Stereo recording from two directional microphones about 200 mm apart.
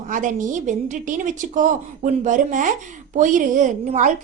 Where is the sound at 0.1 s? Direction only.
40° right (ahead or behind).